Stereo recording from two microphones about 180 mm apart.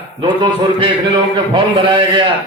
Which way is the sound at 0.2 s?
25° right (ahead or behind).